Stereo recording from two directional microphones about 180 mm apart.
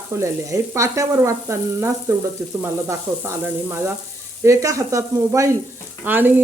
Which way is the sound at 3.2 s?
15° right (ahead or behind).